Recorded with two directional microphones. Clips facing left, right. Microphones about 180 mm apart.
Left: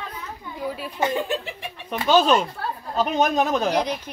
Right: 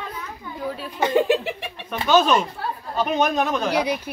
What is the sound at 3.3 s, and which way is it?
Speech, 35° left (ahead or behind).